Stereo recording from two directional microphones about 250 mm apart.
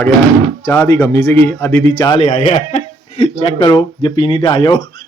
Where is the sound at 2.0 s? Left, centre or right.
Left.